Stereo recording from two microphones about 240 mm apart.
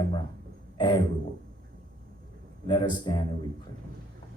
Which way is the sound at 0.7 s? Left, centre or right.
Centre.